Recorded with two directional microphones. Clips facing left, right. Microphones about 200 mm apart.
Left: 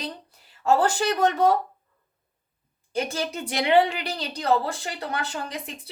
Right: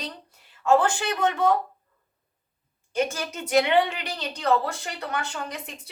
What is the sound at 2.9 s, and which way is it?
A woman's voice, 35° left (ahead or behind).